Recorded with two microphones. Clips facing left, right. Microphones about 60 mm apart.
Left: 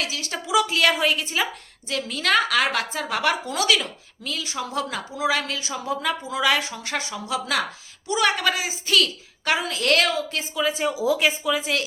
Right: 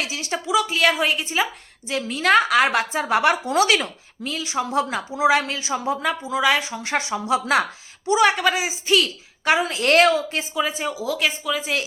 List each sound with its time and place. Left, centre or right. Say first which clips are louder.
0.0 s a woman's voice: right 2 dB; centre
0.4 s a woman's voice: even; centre
6.2 s a woman's voice: right 3 dB; centre
6.8 s a woman's voice: right 5 dB; right
8.3 s a woman's voice: right 3 dB; centre; by 10.4 s right
10.5 s speech: left 1 dB; centre
10.9 s speech: left 2 dB; centre